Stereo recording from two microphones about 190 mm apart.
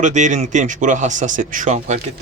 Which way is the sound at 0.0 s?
40° right (ahead or behind).